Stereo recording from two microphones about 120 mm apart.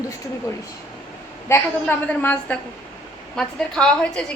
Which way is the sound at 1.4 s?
20° left (ahead or behind).